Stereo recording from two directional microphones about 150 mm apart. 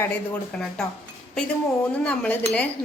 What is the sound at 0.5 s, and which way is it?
Speech, 5° left (ahead or behind).